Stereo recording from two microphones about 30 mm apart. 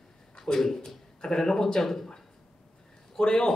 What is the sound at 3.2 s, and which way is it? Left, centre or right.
Speech, left.